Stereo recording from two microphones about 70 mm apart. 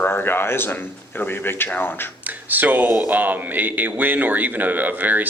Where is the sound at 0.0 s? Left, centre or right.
Left.